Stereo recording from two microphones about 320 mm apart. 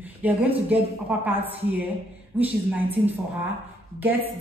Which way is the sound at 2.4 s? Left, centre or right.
Centre.